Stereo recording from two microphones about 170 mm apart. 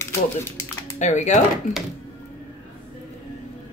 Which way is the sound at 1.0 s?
45° left (ahead or behind).